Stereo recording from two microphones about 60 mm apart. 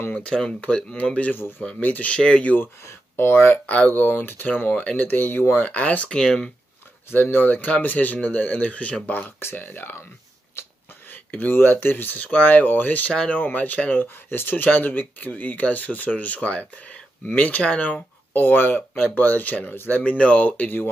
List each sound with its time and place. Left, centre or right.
0.1 s speech: centre
2.6 s speech: left
6.0 s speech: centre
7.1 s speech: left
9.4 s speech: left
11.1 s speech: left
14.0 s speech: left